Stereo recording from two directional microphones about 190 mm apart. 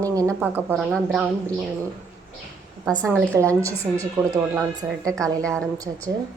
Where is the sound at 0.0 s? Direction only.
15° right (ahead or behind).